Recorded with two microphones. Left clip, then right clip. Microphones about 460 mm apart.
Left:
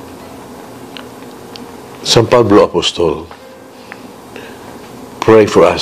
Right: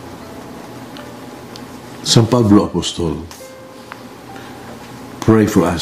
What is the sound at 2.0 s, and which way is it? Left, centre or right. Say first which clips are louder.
Speech: left 6 dB; left.